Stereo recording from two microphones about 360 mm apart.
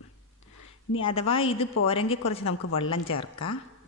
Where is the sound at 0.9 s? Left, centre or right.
Centre.